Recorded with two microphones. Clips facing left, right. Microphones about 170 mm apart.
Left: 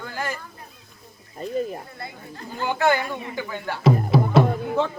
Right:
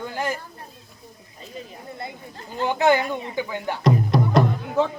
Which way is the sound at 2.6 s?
20° right (ahead or behind).